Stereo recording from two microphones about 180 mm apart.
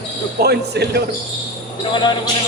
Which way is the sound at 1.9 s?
25° left (ahead or behind).